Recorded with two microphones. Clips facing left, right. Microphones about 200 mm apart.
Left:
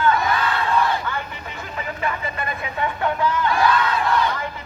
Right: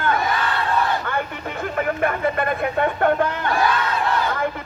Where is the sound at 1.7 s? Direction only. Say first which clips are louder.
Right 5 dB; 55° right (ahead or behind).